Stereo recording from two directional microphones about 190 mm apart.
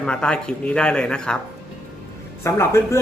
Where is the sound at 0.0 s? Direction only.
5° left (ahead or behind).